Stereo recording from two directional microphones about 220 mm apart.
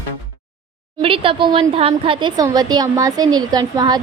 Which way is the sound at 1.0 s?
25° right (ahead or behind).